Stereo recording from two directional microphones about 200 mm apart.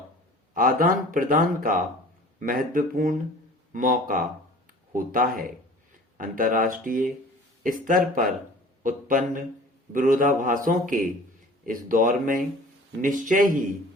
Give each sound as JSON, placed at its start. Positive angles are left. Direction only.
{"t": 0.5, "sound": "speech", "side_deg": -45}